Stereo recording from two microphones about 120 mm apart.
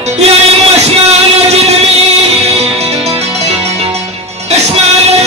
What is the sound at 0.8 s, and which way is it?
Music, 65° right (ahead or behind).